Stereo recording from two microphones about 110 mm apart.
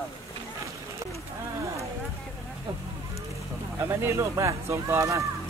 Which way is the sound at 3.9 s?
25° right (ahead or behind).